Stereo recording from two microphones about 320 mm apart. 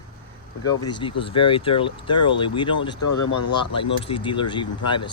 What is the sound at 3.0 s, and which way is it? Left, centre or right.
Speech, left.